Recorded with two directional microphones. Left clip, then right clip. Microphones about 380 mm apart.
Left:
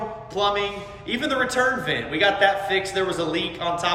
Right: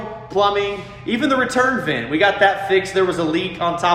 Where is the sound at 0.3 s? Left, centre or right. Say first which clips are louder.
Right 6 dB; centre.